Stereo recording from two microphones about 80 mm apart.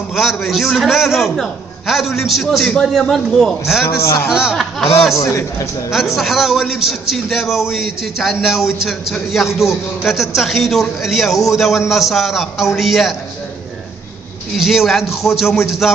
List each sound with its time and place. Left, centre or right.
0.1 s a man's voice: centre
3.8 s a man's voice: left
4.3 s speech: centre
5.1 s a man's voice: left
6.1 s a man's voice: centre
14.6 s a man's voice: centre